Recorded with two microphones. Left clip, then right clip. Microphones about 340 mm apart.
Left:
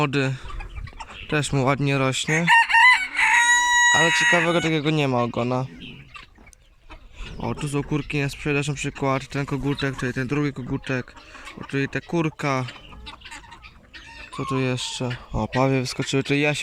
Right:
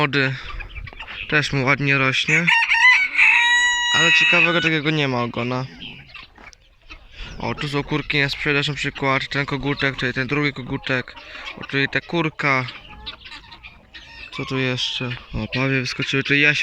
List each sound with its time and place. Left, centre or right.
0.0 s speech: centre
1.3 s chicken: centre; by 3.8 s left
3.8 s speech: left
4.4 s speech: centre
7.4 s speech: centre
14.3 s speech: centre